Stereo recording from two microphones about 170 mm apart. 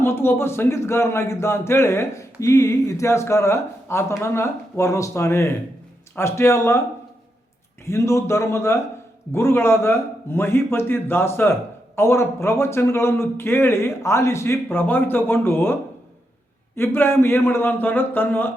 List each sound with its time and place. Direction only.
0.0 s a man's voice: 15° left (ahead or behind)
7.9 s a man's voice: 15° left (ahead or behind)
16.7 s a man's voice: 15° left (ahead or behind)